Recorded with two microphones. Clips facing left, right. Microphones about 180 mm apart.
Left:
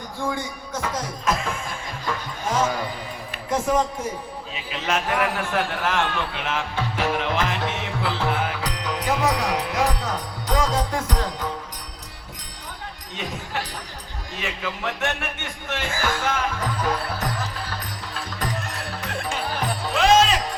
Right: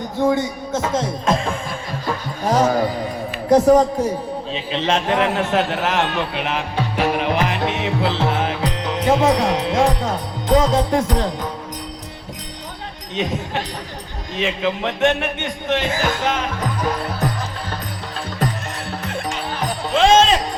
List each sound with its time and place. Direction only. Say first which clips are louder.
0.2 s speech: right 10 dB; 25° right (ahead or behind)
2.5 s music: right 7 dB; 40° right (ahead or behind)
3.5 s a man's voice: right 10 dB; 40° right (ahead or behind)
4.5 s a man's voice: right 5 dB; 30° right (ahead or behind)
13.1 s speech: right 7 dB; 20° right (ahead or behind)
19.9 s music: right 4 dB; 25° right (ahead or behind)